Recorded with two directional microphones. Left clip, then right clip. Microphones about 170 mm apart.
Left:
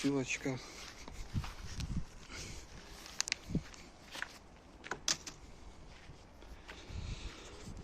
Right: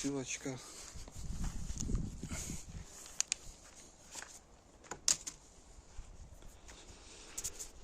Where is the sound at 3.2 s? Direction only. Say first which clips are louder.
Left 1 dB; 45° right (ahead or behind).